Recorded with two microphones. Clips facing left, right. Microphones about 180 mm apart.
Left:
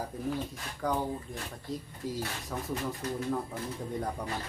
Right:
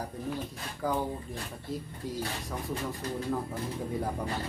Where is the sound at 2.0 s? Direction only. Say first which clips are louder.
Even; centre (ahead or behind).